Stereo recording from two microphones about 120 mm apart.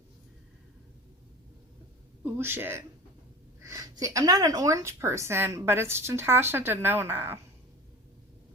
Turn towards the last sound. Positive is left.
turn(degrees=-20)  # may be behind; listen again after turning